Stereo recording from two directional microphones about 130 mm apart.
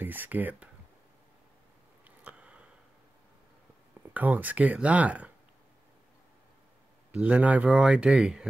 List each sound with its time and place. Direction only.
0.0 s speech: 15° right (ahead or behind)
2.0 s a sound: 10° right (ahead or behind)
4.1 s speech: 10° right (ahead or behind)
7.1 s speech: 10° right (ahead or behind)